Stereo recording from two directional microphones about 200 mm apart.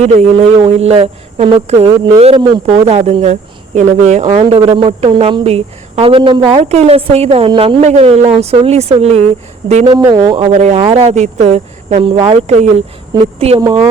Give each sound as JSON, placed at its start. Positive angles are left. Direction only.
{"t": 0.0, "sound": "a man's voice", "side_deg": -30}
{"t": 9.8, "sound": "a man's voice", "side_deg": -20}